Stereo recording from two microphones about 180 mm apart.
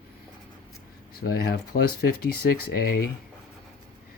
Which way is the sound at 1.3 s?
60° left (ahead or behind).